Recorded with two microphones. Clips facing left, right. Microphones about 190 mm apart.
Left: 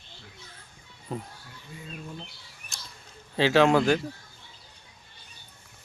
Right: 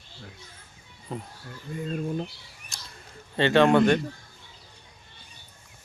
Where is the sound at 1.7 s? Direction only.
55° right (ahead or behind).